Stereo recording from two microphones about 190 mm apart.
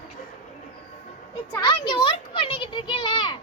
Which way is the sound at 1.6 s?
25° left (ahead or behind).